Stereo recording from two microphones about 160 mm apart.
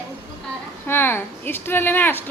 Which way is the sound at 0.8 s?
15° left (ahead or behind).